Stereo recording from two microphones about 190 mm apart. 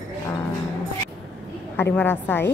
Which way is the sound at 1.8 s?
10° left (ahead or behind).